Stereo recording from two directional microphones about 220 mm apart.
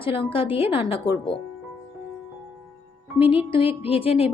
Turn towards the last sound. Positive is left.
turn(degrees=25)  # may be behind; listen again after turning